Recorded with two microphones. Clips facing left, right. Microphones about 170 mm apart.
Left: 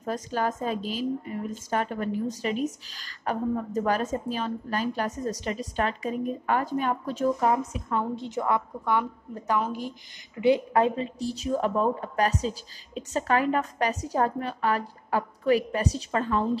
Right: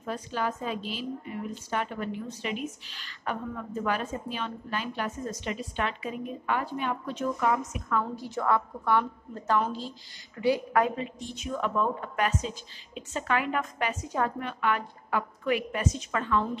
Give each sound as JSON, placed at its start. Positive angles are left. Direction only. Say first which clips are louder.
{"t": 0.0, "sound": "a woman's voice", "louder": "left 3 dB", "side_deg": 40}